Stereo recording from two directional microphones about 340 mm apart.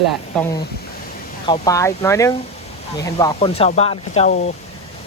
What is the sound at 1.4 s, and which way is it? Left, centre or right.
Speech, centre.